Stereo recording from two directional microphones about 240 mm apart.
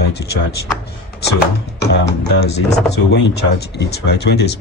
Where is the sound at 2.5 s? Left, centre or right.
Left.